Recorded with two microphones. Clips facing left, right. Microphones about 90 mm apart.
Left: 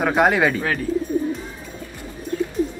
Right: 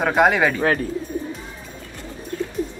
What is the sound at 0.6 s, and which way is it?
Speech, 40° right (ahead or behind).